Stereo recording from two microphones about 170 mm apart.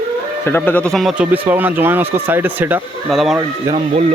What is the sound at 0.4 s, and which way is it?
Speech, 10° left (ahead or behind).